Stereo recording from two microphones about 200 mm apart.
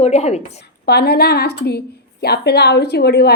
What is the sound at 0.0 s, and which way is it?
Speech, 30° left (ahead or behind).